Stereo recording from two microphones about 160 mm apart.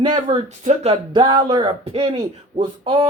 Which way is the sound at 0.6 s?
45° right (ahead or behind).